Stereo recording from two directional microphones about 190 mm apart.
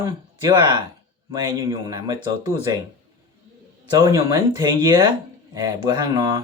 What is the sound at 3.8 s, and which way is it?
Speech, 20° right (ahead or behind).